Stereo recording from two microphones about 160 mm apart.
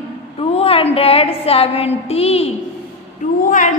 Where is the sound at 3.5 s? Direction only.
50° left (ahead or behind).